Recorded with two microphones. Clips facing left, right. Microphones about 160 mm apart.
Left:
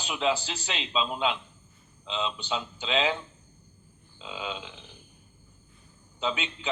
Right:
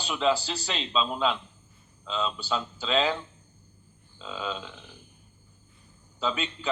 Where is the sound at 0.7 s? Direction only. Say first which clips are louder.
Right 1 dB; 40° right (ahead or behind).